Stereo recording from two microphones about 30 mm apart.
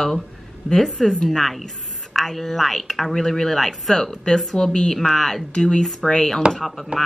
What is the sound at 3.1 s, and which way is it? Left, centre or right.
Speech, centre.